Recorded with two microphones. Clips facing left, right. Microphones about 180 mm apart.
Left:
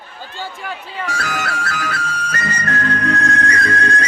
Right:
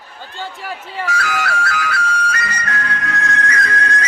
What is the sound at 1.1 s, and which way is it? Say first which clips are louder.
Music: right 3 dB; 40° left (ahead or behind).